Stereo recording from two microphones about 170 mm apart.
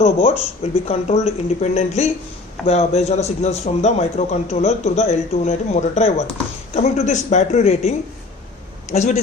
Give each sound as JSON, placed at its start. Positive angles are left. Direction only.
{"t": 0.0, "sound": "a man's voice", "side_deg": 35}